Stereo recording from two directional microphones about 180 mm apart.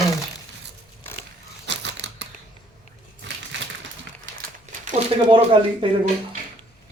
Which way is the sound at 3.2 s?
90° right.